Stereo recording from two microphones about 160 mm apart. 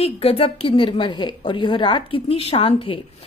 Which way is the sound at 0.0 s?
40° left (ahead or behind).